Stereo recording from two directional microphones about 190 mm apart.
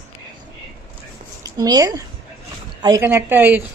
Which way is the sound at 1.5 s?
20° right (ahead or behind).